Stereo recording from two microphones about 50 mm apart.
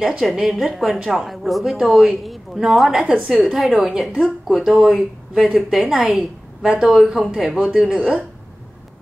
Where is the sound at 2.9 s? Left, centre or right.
Centre.